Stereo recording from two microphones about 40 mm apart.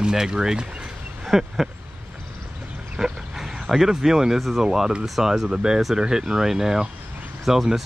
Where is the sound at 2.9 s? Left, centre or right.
Centre.